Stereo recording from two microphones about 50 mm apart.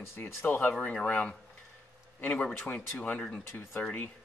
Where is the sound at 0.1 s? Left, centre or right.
Left.